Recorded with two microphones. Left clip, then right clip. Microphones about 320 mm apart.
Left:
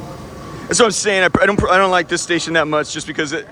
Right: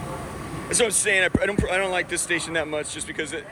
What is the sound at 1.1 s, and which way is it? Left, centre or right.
Speech, left.